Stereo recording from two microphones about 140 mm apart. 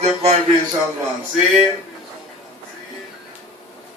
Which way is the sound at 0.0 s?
50° right (ahead or behind).